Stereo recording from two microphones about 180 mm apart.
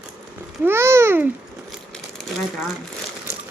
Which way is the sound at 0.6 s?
15° right (ahead or behind).